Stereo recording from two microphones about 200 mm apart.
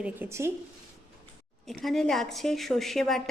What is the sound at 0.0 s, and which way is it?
Speech, 10° right (ahead or behind).